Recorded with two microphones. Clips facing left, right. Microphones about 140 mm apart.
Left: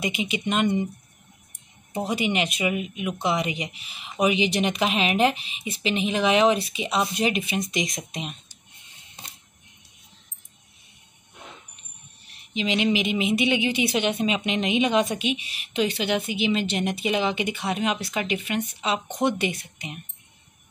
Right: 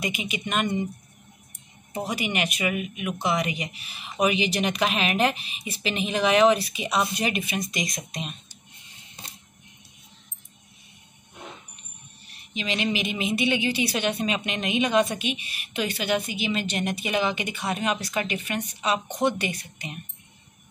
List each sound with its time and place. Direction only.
0.0 s a woman's voice: 25° left (ahead or behind)
2.0 s a woman's voice: 25° left (ahead or behind)
12.5 s a woman's voice: 20° left (ahead or behind)